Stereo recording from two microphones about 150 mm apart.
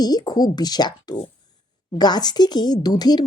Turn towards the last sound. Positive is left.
turn(degrees=25)  # may be behind; listen again after turning